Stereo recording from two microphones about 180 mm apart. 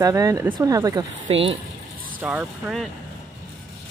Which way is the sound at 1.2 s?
35° right (ahead or behind).